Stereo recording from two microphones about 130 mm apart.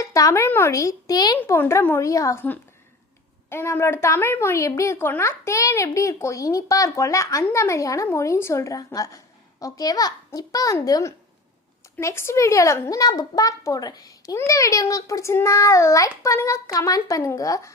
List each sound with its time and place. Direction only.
0.0 s speech: 25° left (ahead or behind)
1.4 s speech: 15° left (ahead or behind)